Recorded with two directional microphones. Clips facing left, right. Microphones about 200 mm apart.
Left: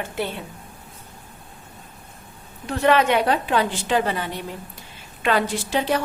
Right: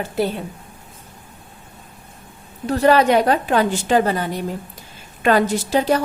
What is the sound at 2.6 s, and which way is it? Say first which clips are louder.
A woman's voice: right 4 dB; 35° right (ahead or behind).